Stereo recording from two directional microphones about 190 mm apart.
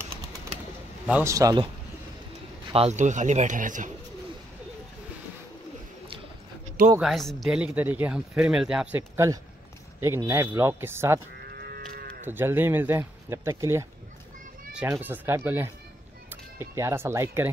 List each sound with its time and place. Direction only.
1.0 s a man's voice: 5° right (ahead or behind)
1.3 s a man's voice: 20° right (ahead or behind)
2.7 s speech: 35° right (ahead or behind)
7.0 s speech: centre (ahead or behind)
11.4 s livestock: 55° right (ahead or behind)
12.3 s speech: 10° right (ahead or behind)